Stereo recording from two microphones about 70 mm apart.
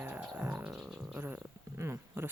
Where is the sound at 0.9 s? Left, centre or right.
Centre.